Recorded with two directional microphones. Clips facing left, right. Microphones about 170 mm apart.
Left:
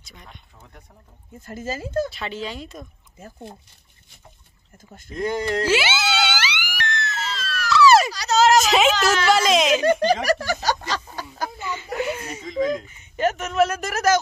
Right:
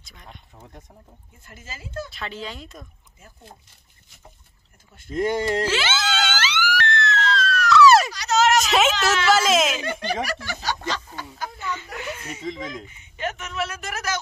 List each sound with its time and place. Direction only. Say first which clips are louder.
1.4 s speech: left 12 dB; 40° left (ahead or behind)
2.0 s speech: left 4 dB; centre (ahead or behind)
5.1 s speech: right 1 dB; 25° right (ahead or behind)
5.7 s wail: left 3 dB; 10° left (ahead or behind)
8.1 s a sound: left 3 dB; 35° left (ahead or behind)
8.6 s a sound: left 2 dB; centre (ahead or behind)
9.0 s speech: left 1 dB; centre (ahead or behind)
9.8 s speech: left 8 dB; 40° left (ahead or behind)
13.1 s speech: left 8 dB; 40° left (ahead or behind)